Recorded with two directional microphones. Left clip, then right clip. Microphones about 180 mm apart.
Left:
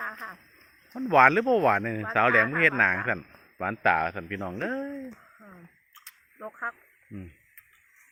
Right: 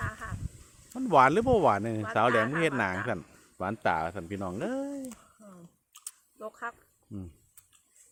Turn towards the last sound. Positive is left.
turn(degrees=-15)  # may be behind; listen again after turning